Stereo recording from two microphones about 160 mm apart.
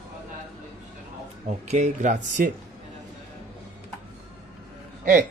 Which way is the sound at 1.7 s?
50° right (ahead or behind).